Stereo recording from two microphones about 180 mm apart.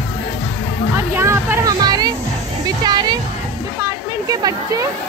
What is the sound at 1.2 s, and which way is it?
Music, 15° right (ahead or behind).